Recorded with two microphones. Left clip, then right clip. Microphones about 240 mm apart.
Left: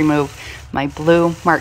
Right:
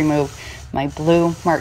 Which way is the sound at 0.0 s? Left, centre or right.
Left.